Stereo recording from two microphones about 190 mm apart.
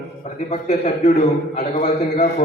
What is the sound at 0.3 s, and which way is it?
A man's voice, 35° left (ahead or behind).